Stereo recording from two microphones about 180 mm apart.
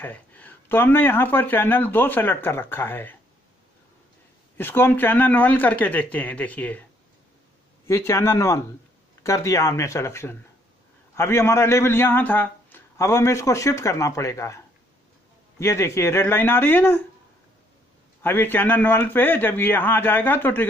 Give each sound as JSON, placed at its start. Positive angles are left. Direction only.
{"t": 0.0, "sound": "speech", "side_deg": 10}
{"t": 4.6, "sound": "speech", "side_deg": 10}
{"t": 7.8, "sound": "speech", "side_deg": 15}
{"t": 15.6, "sound": "speech", "side_deg": 15}
{"t": 18.2, "sound": "speech", "side_deg": 10}